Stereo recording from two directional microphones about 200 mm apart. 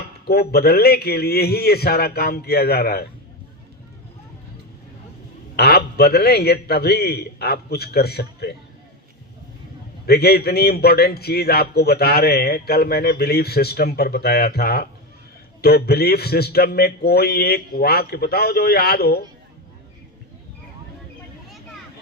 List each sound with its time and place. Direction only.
0.3 s a man's voice: 50° left (ahead or behind)
5.5 s a man's voice: 50° left (ahead or behind)
10.1 s a man's voice: 50° left (ahead or behind)